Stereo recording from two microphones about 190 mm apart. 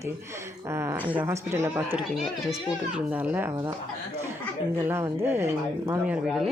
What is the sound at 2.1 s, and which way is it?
Speech, centre (ahead or behind).